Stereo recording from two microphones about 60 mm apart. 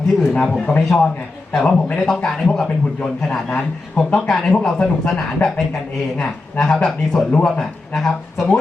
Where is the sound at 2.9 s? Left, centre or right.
Centre.